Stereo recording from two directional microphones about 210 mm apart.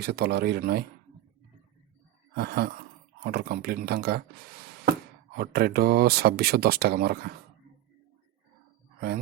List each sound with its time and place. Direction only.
0.0 s speech: 50° right (ahead or behind)
2.3 s speech: 50° right (ahead or behind)
5.4 s speech: 45° right (ahead or behind)